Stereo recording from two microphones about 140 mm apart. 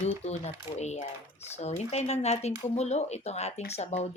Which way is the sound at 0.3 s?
50° left (ahead or behind).